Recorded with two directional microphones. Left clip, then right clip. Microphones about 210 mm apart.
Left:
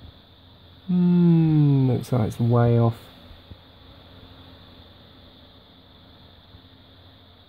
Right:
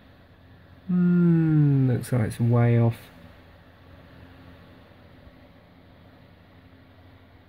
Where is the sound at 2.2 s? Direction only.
30° left (ahead or behind).